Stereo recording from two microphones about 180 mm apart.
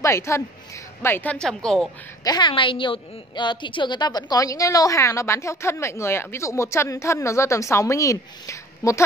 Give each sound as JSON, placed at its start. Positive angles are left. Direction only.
{"t": 0.0, "sound": "a woman's voice", "side_deg": 15}
{"t": 2.2, "sound": "a woman's voice", "side_deg": 25}